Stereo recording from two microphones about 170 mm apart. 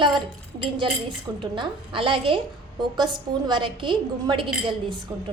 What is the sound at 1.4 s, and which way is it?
A woman's voice, 30° right (ahead or behind).